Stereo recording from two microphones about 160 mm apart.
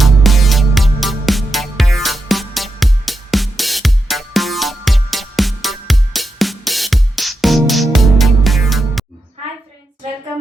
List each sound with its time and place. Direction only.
0.0 s music: centre (ahead or behind)